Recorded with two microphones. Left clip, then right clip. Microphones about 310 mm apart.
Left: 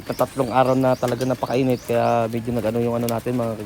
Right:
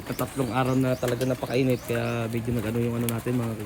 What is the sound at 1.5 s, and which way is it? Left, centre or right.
Speech, left.